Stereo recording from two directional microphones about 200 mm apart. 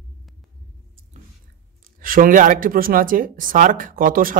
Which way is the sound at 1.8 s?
45° right (ahead or behind).